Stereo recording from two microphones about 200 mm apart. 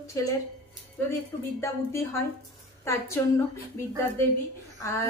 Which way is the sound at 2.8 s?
15° left (ahead or behind).